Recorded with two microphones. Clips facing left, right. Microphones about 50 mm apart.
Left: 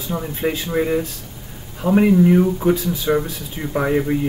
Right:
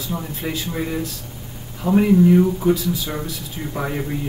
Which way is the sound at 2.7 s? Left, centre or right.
Left.